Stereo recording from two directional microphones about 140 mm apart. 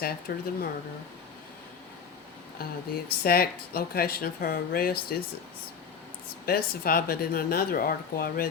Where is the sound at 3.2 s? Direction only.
90° left.